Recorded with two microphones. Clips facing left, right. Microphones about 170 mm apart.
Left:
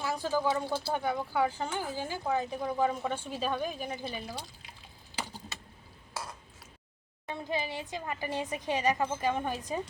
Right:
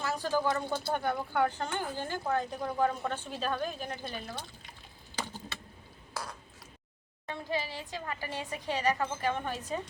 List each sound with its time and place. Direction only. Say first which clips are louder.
0.0 s speech: even; 10° left (ahead or behind)
7.3 s speech: left 1 dB; 20° left (ahead or behind)